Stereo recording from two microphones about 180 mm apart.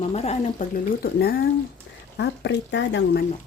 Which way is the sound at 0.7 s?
55° left (ahead or behind).